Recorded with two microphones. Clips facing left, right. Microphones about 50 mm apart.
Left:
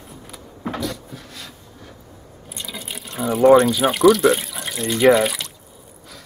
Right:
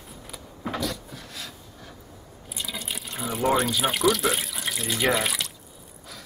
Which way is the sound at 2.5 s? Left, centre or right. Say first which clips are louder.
Left 1 dB; centre.